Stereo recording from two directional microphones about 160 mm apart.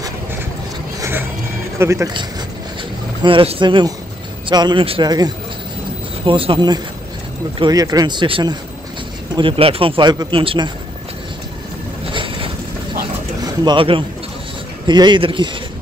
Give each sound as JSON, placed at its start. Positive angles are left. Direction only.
{"t": 1.8, "sound": "speech", "side_deg": -20}
{"t": 3.2, "sound": "speech", "side_deg": -30}
{"t": 12.1, "sound": "boat", "side_deg": -30}
{"t": 13.4, "sound": "speech", "side_deg": -30}